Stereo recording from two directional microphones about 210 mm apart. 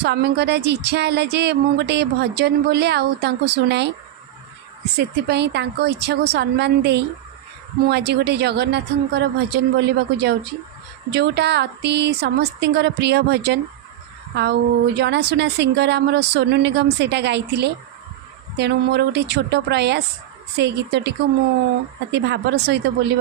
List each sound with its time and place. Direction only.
0.0 s speech: 55° right (ahead or behind)
4.9 s speech: 55° right (ahead or behind)